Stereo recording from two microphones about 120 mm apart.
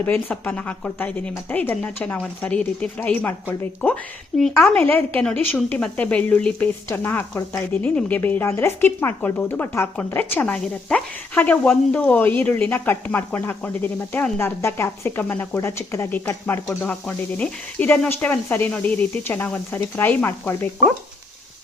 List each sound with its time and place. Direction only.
0.0 s speech: 15° left (ahead or behind)